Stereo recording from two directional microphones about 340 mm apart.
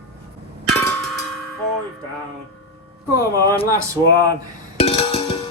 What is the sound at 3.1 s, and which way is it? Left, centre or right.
Speech, centre.